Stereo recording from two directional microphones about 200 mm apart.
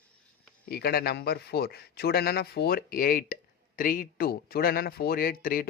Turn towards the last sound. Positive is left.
turn(degrees=45)  # may be behind; listen again after turning